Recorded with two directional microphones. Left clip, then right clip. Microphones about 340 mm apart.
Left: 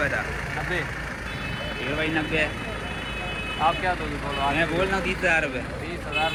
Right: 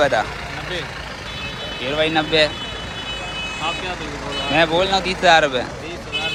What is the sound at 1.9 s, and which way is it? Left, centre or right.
Speech, centre.